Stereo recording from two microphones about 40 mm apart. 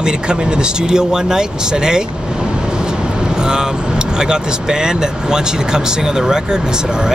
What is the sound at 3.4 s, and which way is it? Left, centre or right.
Vehicle, centre.